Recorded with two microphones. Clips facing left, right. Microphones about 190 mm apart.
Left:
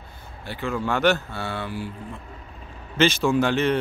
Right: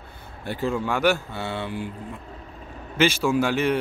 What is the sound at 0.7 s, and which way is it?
Speech, 10° right (ahead or behind).